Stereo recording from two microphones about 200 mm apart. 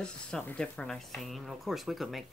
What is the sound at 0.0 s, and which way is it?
Speech, 5° left (ahead or behind).